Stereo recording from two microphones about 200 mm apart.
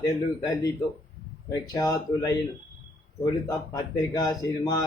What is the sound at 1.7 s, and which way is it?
Speech, 15° left (ahead or behind).